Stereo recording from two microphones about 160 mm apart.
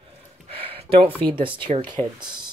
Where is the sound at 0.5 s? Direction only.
35° right (ahead or behind).